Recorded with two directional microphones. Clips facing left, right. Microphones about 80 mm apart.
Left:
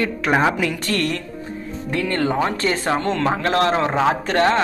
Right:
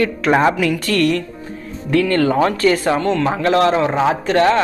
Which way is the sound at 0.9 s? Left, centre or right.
Left.